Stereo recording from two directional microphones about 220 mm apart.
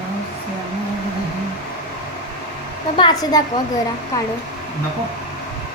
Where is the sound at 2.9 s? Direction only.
20° left (ahead or behind).